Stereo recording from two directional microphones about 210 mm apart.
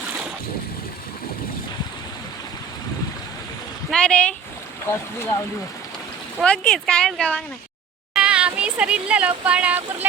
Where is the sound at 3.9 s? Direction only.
5° left (ahead or behind).